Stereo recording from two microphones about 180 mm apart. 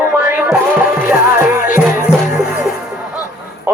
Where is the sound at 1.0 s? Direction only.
10° right (ahead or behind).